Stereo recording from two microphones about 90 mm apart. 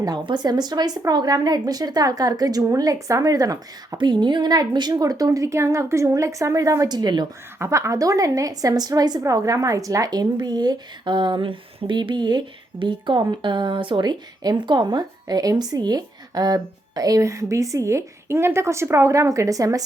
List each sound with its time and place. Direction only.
0.3 s a woman's voice: 50° right (ahead or behind)
3.9 s a woman's voice: 60° right (ahead or behind); by 6.9 s 40° right (ahead or behind)
6.9 s speech: 55° right (ahead or behind)
7.6 s a woman's voice: 35° right (ahead or behind)
9.2 s speech: 40° right (ahead or behind); by 12.4 s 55° right (ahead or behind)
12.8 s speech: 65° right (ahead or behind); by 19.8 s 40° right (ahead or behind)